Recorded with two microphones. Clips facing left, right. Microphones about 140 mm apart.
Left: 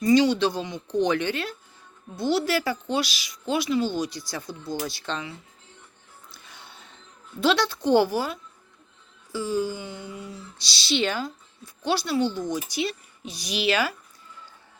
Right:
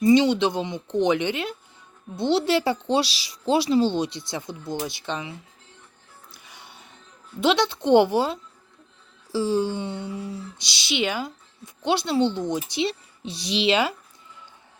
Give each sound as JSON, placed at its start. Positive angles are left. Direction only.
{"t": 0.0, "sound": "a woman's voice", "side_deg": -20}
{"t": 6.3, "sound": "music", "side_deg": -15}
{"t": 7.4, "sound": "a woman's voice", "side_deg": -20}
{"t": 10.6, "sound": "a woman's voice", "side_deg": -15}